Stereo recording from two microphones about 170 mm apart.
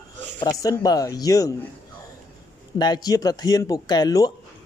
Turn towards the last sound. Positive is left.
turn(degrees=20)  # may be behind; listen again after turning